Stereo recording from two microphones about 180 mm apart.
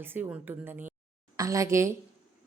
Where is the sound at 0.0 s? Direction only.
10° right (ahead or behind).